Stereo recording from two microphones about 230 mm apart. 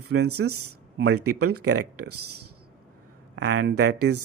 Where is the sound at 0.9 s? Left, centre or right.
Right.